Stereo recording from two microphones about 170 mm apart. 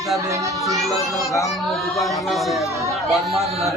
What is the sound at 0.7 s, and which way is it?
Speech, centre (ahead or behind).